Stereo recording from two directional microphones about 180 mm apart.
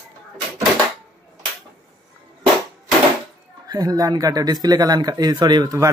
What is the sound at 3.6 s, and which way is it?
Speech, 20° right (ahead or behind).